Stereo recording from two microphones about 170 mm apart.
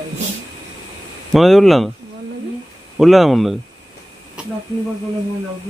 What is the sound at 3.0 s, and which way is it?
Speech, centre (ahead or behind).